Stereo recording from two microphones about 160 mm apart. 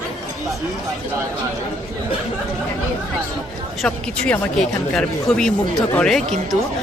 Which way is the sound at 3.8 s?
5° left (ahead or behind).